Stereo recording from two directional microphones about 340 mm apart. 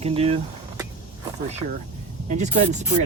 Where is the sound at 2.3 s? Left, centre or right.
Centre.